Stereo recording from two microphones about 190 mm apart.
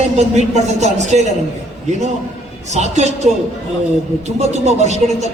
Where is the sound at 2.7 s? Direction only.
35° right (ahead or behind).